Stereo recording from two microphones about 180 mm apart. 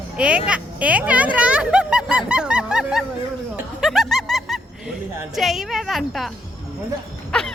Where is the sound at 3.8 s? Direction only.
Centre (ahead or behind).